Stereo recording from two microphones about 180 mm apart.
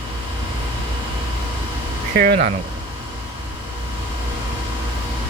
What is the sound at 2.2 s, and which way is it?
Speech, 55° right (ahead or behind).